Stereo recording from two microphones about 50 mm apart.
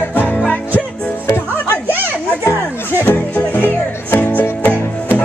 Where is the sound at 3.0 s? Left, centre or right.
Left.